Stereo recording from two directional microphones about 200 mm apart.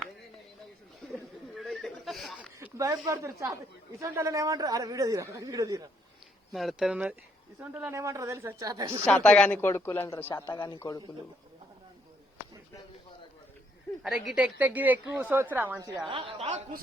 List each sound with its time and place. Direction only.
1.5 s chuckle: centre (ahead or behind)
2.6 s a man's voice: 15° right (ahead or behind)
6.5 s a man's voice: centre (ahead or behind); by 9.0 s 20° right (ahead or behind)
9.0 s speech: 5° left (ahead or behind)
14.0 s a man's voice: 5° right (ahead or behind)
16.0 s speech: 25° right (ahead or behind)